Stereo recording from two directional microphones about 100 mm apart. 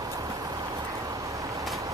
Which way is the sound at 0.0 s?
35° right (ahead or behind).